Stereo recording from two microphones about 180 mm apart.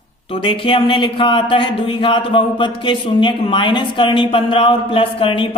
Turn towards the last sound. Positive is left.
turn(degrees=30)  # may be behind; listen again after turning